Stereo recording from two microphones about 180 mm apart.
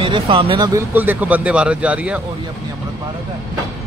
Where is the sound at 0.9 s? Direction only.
10° right (ahead or behind).